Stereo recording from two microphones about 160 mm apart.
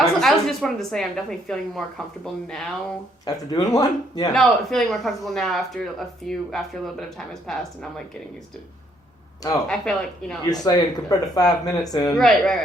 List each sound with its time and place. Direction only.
0.0 s a woman's voice: centre (ahead or behind)
3.2 s speech: 25° left (ahead or behind)
4.3 s a woman's voice: centre (ahead or behind)
9.6 s a woman's voice: 5° left (ahead or behind)
10.5 s speech: 25° left (ahead or behind)
12.1 s a woman's voice: centre (ahead or behind)